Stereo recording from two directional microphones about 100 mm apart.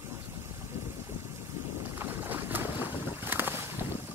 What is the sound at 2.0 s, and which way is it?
Boat, 20° right (ahead or behind).